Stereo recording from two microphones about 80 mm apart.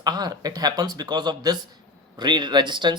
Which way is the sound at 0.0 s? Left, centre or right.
Right.